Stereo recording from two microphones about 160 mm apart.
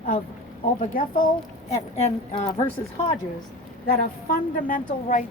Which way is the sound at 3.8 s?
65° left (ahead or behind).